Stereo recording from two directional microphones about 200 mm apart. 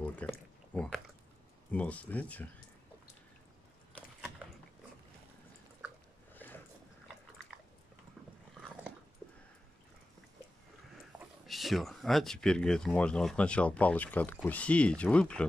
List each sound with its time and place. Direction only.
0.0 s drip: 5° left (ahead or behind)
1.7 s speech: 5° left (ahead or behind)
6.3 s a sound: 10° left (ahead or behind)
11.1 s speech: centre (ahead or behind)